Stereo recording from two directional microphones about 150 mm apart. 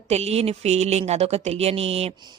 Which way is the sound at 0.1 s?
45° right (ahead or behind).